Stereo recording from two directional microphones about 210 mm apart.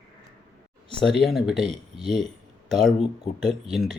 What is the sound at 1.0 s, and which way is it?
Speech, centre (ahead or behind).